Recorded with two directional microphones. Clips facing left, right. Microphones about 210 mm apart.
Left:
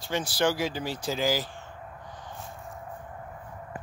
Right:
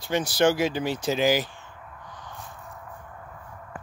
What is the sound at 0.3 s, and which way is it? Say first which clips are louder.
Speech: right 5 dB; 20° right (ahead or behind).